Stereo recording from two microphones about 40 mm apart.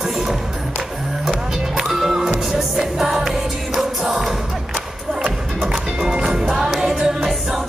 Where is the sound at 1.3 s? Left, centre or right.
Centre.